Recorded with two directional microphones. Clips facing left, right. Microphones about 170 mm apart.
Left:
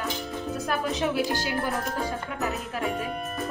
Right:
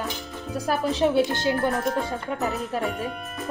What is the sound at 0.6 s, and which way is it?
Speech, 30° right (ahead or behind).